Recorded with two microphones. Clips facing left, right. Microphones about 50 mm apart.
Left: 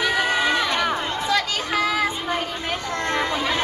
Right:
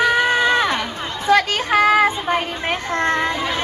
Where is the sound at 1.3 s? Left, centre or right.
Right.